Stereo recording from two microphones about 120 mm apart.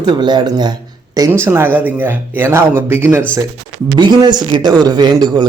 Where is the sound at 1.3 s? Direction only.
20° right (ahead or behind).